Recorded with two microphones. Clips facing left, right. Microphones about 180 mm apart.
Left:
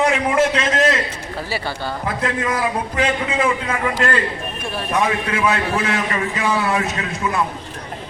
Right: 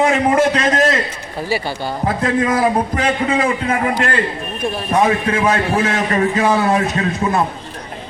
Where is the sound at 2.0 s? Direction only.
35° right (ahead or behind).